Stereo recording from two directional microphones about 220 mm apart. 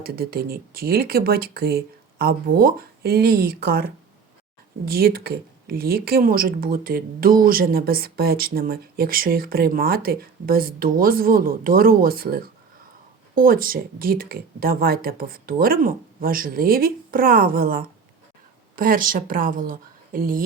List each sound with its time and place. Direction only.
0.0 s speech: 45° right (ahead or behind)